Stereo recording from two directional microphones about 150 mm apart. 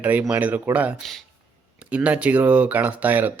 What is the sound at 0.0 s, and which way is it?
Speech, 10° right (ahead or behind).